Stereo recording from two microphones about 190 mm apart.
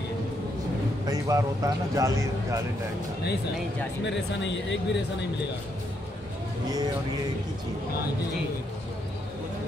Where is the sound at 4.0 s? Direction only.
70° left (ahead or behind).